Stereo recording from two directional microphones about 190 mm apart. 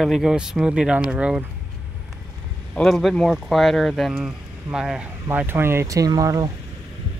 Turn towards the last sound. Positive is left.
turn(degrees=-20)  # may be behind; listen again after turning